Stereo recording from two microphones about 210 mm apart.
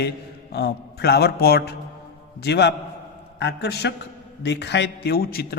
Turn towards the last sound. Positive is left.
turn(degrees=45)  # may be behind; listen again after turning